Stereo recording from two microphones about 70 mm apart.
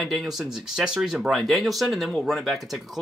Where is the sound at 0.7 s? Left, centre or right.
Centre.